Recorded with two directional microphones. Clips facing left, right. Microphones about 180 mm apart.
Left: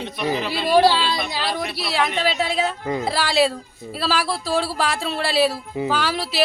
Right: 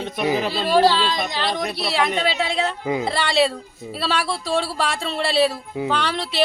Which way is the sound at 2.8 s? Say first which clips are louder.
Right 1 dB; 10° right (ahead or behind).